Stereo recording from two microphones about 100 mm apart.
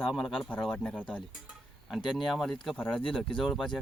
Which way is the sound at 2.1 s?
Centre (ahead or behind).